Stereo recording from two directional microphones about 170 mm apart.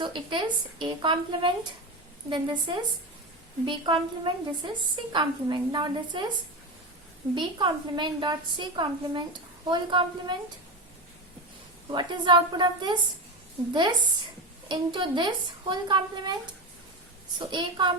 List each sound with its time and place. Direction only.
0.0 s a woman's voice: 30° right (ahead or behind)
7.3 s a woman's voice: 25° right (ahead or behind)
11.9 s a woman's voice: 25° right (ahead or behind)
14.7 s a woman's voice: 25° right (ahead or behind)
17.4 s a woman's voice: 25° right (ahead or behind)